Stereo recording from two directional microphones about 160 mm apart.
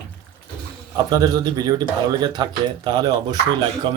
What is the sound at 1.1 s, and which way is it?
Speech, 25° right (ahead or behind).